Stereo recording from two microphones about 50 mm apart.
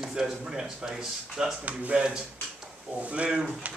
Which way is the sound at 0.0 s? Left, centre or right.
Centre.